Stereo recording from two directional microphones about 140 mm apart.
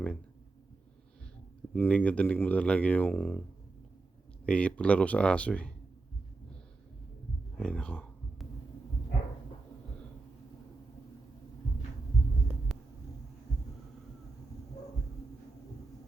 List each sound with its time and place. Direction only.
1.7 s speech: 10° left (ahead or behind)
4.4 s speech: 10° left (ahead or behind)
7.6 s a sound: 5° left (ahead or behind)
12.7 s hum: centre (ahead or behind)